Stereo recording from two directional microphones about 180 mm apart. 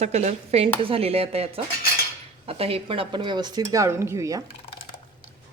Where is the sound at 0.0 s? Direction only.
35° right (ahead or behind); by 4.4 s 20° right (ahead or behind).